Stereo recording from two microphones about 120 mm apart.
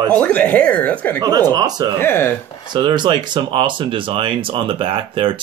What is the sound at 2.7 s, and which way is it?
Speech, 40° right (ahead or behind).